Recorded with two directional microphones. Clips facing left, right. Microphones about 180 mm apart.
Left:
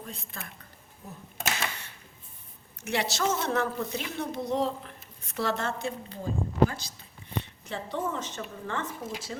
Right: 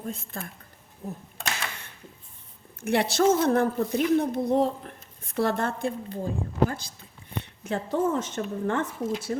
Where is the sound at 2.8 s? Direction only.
55° right (ahead or behind).